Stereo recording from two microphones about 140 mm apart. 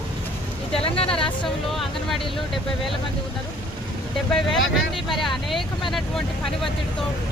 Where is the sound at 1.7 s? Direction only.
Centre (ahead or behind).